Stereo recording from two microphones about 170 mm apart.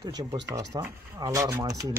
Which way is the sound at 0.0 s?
20° right (ahead or behind).